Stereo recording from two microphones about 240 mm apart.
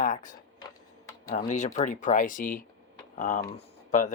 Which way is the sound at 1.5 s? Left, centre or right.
Left.